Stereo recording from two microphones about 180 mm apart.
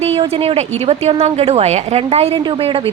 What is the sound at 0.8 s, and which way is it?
Speech, 35° right (ahead or behind).